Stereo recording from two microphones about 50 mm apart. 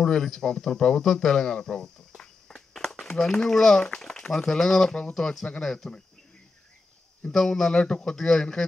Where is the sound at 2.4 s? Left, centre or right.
Centre.